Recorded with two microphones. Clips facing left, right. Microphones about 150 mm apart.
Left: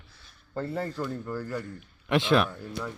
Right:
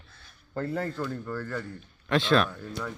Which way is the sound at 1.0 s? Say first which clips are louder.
Even; 15° left (ahead or behind).